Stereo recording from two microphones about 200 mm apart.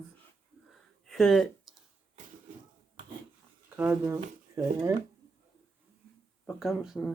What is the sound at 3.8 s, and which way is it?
Speech, 10° right (ahead or behind).